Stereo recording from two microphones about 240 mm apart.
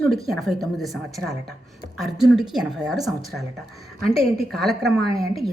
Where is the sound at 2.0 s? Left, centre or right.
Centre.